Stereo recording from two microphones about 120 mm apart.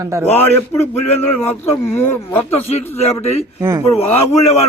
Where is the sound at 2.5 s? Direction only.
60° left (ahead or behind).